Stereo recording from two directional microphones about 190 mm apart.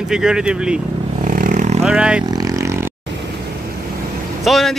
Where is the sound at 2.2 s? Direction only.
20° right (ahead or behind).